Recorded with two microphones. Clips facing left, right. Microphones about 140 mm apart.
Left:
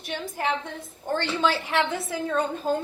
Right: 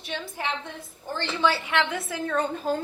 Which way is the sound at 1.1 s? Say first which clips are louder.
Left 1 dB; 55° left (ahead or behind).